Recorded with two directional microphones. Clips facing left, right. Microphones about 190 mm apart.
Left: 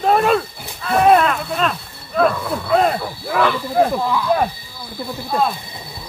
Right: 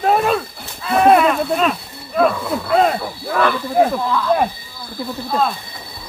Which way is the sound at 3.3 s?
10° left (ahead or behind).